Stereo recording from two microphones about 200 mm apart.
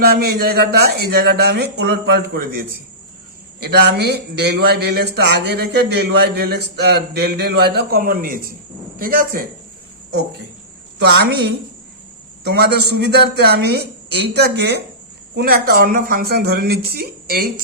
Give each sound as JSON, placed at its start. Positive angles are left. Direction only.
{"t": 0.0, "sound": "a man's voice", "side_deg": -50}
{"t": 11.0, "sound": "a woman's voice", "side_deg": -55}